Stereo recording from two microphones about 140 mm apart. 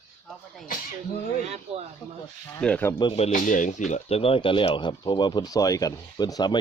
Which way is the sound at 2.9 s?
35° left (ahead or behind).